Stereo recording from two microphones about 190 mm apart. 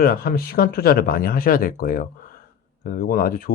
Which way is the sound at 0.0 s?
50° left (ahead or behind).